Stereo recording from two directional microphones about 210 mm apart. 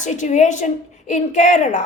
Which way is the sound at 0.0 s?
35° left (ahead or behind).